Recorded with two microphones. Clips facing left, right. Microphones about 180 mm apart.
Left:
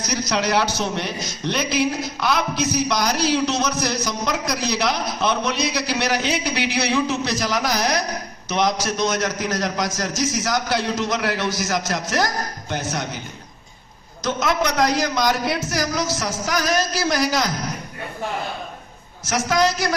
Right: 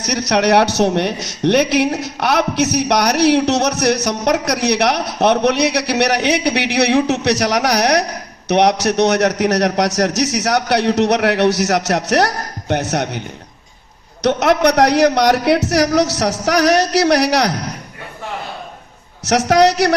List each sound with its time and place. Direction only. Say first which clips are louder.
0.0 s a man's voice: right 7 dB; 70° right (ahead or behind)
19.2 s a man's voice: right 8 dB; 70° right (ahead or behind)